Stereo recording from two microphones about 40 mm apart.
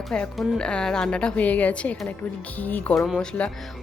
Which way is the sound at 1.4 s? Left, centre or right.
Left.